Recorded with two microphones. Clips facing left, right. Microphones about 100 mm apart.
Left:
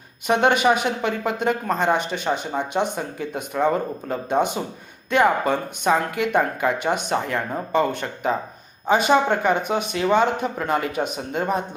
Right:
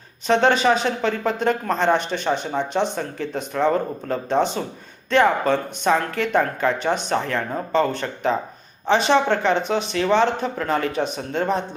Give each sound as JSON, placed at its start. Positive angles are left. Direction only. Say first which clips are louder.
{"t": 0.3, "sound": "speech", "louder": "right 1 dB", "side_deg": 15}